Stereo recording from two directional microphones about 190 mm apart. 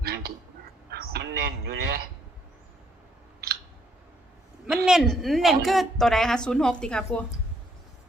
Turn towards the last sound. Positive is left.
turn(degrees=5)  # may be behind; listen again after turning